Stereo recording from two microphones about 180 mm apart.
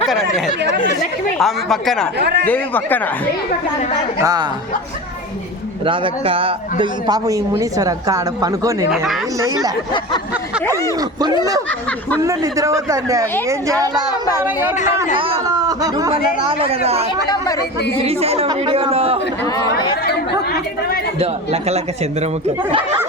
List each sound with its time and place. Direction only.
0.1 s speech: centre (ahead or behind)
2.1 s speech: 65° right (ahead or behind)
2.5 s speech: 10° left (ahead or behind)
4.2 s a man's voice: 20° right (ahead or behind)
5.8 s a man's voice: 30° right (ahead or behind)
12.2 s a man's voice: 15° right (ahead or behind)
15.1 s speech: 30° right (ahead or behind)
16.5 s a man's voice: 35° right (ahead or behind)
17.2 s speech: 20° left (ahead or behind)
18.0 s a man's voice: 35° right (ahead or behind)
21.2 s a man's voice: 35° right (ahead or behind)